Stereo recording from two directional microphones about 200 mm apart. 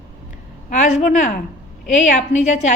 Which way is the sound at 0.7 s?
35° left (ahead or behind).